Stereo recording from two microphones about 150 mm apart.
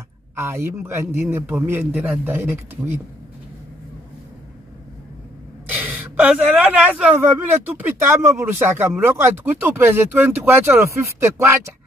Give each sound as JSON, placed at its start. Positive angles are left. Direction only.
{"t": 0.4, "sound": "speech", "side_deg": -20}
{"t": 5.7, "sound": "speech", "side_deg": -10}